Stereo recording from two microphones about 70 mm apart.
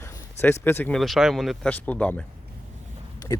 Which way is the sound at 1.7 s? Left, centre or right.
Left.